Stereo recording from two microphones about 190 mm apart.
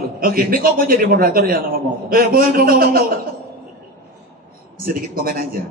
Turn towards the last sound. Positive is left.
turn(degrees=-50)  # may be behind; listen again after turning